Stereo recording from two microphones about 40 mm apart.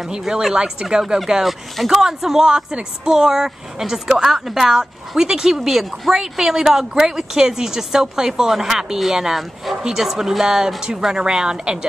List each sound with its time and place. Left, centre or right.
0.6 s a woman's voice: right